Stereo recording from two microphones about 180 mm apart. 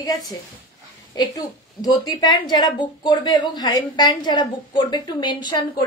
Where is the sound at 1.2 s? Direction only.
20° left (ahead or behind).